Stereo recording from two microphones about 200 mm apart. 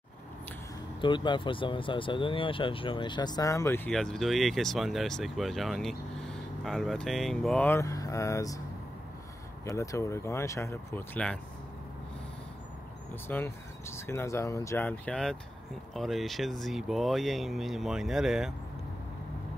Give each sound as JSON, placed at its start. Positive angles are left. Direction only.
{"t": 1.0, "sound": "speech", "side_deg": 25}
{"t": 9.7, "sound": "speech", "side_deg": 15}
{"t": 13.1, "sound": "speech", "side_deg": 10}